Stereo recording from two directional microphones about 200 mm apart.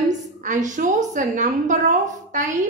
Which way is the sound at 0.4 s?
40° right (ahead or behind).